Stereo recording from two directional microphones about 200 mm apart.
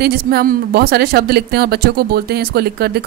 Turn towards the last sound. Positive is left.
turn(degrees=-50)  # may be behind; listen again after turning